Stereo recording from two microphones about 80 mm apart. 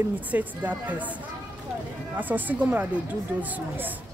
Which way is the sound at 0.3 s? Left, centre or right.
Right.